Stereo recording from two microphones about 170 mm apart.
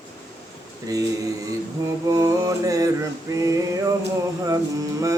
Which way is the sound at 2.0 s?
20° right (ahead or behind).